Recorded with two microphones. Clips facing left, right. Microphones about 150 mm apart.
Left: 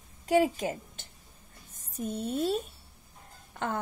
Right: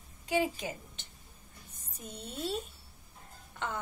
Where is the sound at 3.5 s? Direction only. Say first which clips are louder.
Left 5 dB; 50° left (ahead or behind).